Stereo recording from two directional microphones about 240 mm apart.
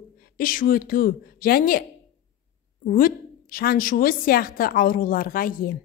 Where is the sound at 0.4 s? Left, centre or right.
Left.